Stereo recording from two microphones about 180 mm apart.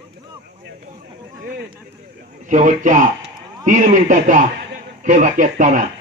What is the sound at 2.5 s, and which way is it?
A man's voice, 45° right (ahead or behind).